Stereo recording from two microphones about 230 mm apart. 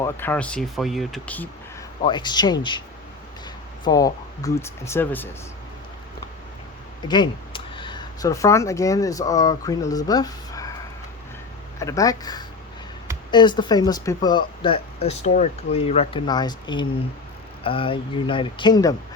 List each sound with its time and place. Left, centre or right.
0.0 s speech: centre
2.0 s speech: centre
3.8 s speech: centre
7.1 s speech: left
11.8 s speech: centre